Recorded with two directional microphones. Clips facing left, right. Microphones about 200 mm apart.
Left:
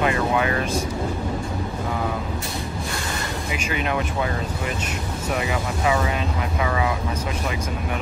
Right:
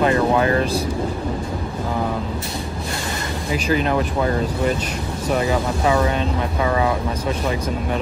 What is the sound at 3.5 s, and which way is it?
Speech, 35° right (ahead or behind).